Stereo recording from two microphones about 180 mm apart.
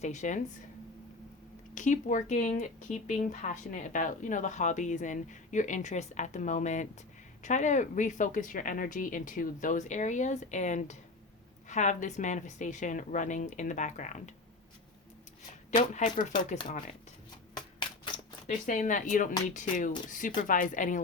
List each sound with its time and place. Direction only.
0.0 s speech: 40° left (ahead or behind)
1.7 s speech: 45° left (ahead or behind)
15.7 s speech: 40° left (ahead or behind)
17.7 s typewriter: 25° left (ahead or behind)
18.4 s speech: 45° left (ahead or behind)